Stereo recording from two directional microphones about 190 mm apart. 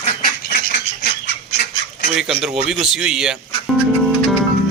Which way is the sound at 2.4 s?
Centre (ahead or behind).